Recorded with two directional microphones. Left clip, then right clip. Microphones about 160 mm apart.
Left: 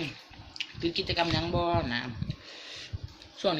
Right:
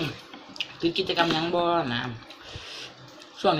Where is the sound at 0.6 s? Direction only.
10° left (ahead or behind).